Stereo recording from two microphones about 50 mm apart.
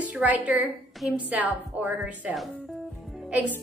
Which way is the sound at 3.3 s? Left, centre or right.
Right.